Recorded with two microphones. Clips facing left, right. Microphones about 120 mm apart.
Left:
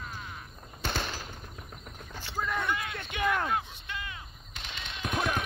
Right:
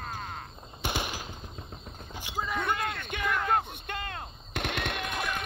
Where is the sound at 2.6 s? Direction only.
55° right (ahead or behind).